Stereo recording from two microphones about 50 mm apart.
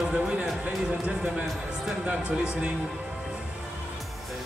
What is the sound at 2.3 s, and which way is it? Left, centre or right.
Speech, right.